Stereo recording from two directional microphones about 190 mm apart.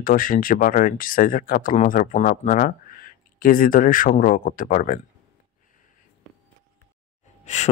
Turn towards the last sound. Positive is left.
turn(degrees=35)  # may be behind; listen again after turning